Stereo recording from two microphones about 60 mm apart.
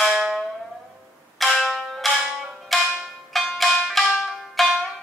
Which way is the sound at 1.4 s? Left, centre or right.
Centre.